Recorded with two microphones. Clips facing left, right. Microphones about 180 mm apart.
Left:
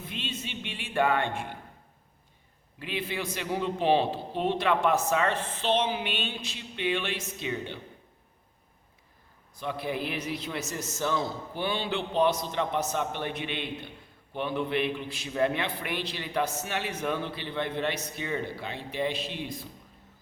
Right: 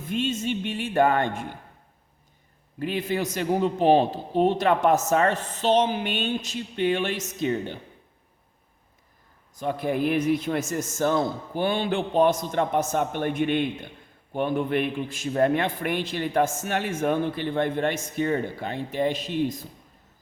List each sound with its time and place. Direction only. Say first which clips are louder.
0.0 s a man's voice: right 11 dB; 45° right (ahead or behind)
2.7 s a man's voice: right 7 dB; 45° right (ahead or behind)
9.6 s a man's voice: right 7 dB; 45° right (ahead or behind)